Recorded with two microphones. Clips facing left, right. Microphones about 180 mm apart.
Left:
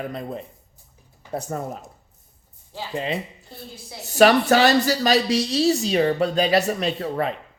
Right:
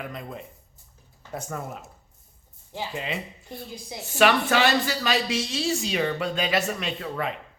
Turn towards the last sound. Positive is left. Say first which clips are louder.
# left 6 dB
turn(degrees=35)  # may be behind; listen again after turning